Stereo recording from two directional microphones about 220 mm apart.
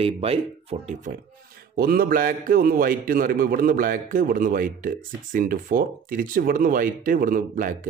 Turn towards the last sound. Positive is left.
turn(degrees=-40)  # may be behind; listen again after turning